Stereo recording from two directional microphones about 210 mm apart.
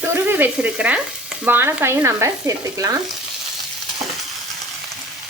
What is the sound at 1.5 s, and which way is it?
Frying, 10° right (ahead or behind).